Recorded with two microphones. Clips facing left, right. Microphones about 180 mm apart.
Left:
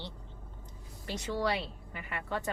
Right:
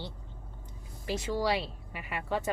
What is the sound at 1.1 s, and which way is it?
Speech, centre (ahead or behind).